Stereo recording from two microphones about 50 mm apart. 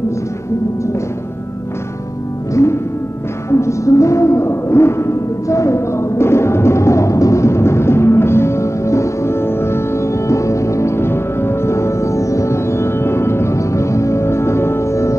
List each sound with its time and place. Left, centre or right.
2.5 s music: left